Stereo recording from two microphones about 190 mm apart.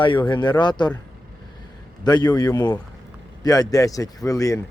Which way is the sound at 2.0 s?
20° left (ahead or behind).